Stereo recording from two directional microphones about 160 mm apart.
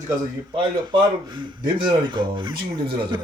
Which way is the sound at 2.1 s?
30° right (ahead or behind).